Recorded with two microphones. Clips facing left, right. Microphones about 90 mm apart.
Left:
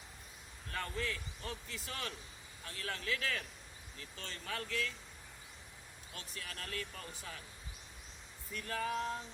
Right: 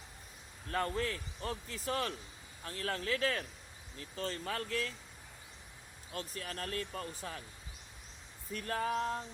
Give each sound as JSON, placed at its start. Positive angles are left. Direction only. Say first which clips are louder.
{"t": 0.7, "sound": "a man's voice", "louder": "right 5 dB", "side_deg": -40}
{"t": 6.1, "sound": "a man's voice", "louder": "right 7 dB", "side_deg": -40}
{"t": 8.5, "sound": "a man's voice", "louder": "right 3 dB", "side_deg": -40}